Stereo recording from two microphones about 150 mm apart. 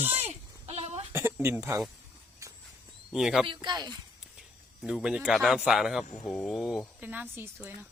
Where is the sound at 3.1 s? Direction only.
Centre (ahead or behind).